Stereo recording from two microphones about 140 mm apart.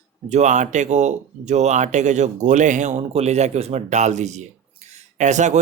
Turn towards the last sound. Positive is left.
turn(degrees=-60)  # may be behind; listen again after turning